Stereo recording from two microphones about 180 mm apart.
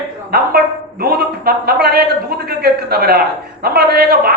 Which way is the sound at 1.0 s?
60° right (ahead or behind).